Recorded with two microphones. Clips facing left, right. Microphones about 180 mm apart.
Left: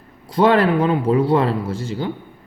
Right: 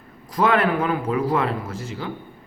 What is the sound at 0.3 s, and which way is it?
Speech, 30° left (ahead or behind).